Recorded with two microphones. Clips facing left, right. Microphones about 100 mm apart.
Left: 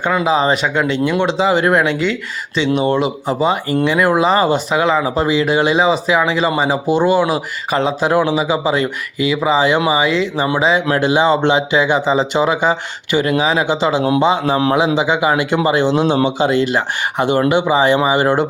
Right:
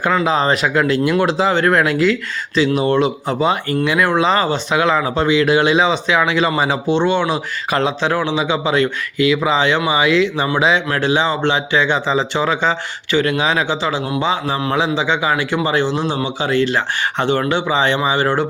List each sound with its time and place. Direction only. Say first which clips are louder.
0.1 s speech: left 2 dB; 10° left (ahead or behind)
1.5 s speech: left 2 dB; 10° left (ahead or behind)
1.8 s speech: right 2 dB; centre (ahead or behind)
10.8 s speech: left 4 dB; 20° left (ahead or behind)